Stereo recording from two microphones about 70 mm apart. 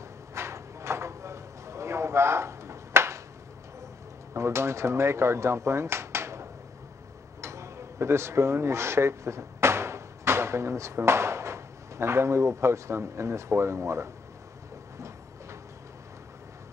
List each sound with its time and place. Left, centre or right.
0.3 s a sound: right
4.3 s speech: right
7.4 s speech: right